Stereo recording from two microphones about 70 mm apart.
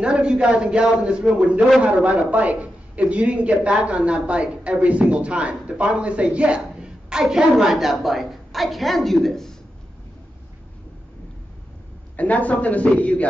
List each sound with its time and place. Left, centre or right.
0.0 s a man's voice: centre
2.0 s a man's voice: centre
12.2 s speech: left